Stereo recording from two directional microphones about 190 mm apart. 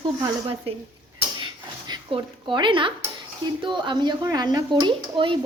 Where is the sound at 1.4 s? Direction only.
25° right (ahead or behind).